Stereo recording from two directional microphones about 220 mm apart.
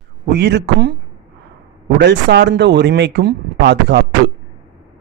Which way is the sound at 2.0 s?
50° right (ahead or behind).